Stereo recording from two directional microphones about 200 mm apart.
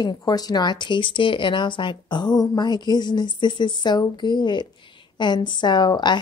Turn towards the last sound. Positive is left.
turn(degrees=20)  # may be behind; listen again after turning